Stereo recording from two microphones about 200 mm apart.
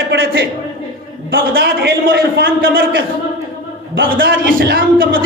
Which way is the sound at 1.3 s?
65° right (ahead or behind).